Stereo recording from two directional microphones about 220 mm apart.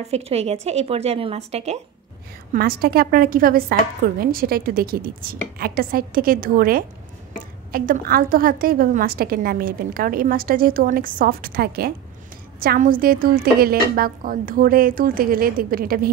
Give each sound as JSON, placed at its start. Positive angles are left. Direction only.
{"t": 0.0, "sound": "speech", "side_deg": -30}
{"t": 2.5, "sound": "a woman's voice", "side_deg": -45}